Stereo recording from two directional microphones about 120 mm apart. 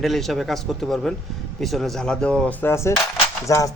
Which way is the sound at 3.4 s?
25° left (ahead or behind).